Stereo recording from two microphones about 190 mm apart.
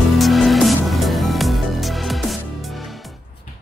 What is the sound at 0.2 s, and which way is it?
Music, centre (ahead or behind).